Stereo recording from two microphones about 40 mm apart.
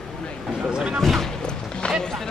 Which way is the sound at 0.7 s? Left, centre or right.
Right.